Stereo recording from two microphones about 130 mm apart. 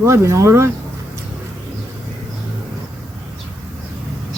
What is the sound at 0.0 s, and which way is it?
Speech, 20° right (ahead or behind).